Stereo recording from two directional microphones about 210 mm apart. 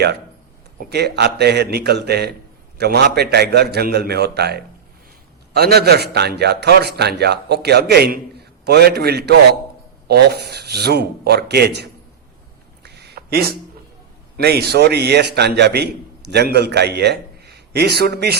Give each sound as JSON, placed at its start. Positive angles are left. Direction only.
{"t": 0.9, "sound": "a man's voice", "side_deg": -50}
{"t": 12.8, "sound": "a sound", "side_deg": -50}
{"t": 14.3, "sound": "a man's voice", "side_deg": -50}